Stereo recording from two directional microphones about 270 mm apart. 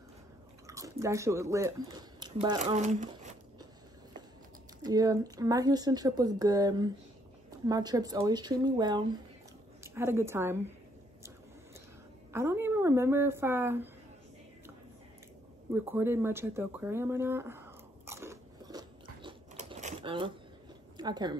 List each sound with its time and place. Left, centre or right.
0.7 s speech: centre
4.8 s speech: centre
12.3 s speech: centre
15.7 s a sound: centre
19.5 s typewriter: right
21.0 s speech: centre